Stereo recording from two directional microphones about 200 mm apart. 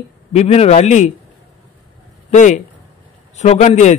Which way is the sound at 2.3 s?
35° left (ahead or behind).